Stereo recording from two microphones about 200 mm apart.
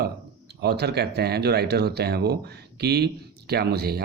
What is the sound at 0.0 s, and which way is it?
Speech, 55° right (ahead or behind).